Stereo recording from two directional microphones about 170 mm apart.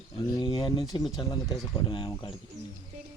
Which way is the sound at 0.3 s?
25° left (ahead or behind).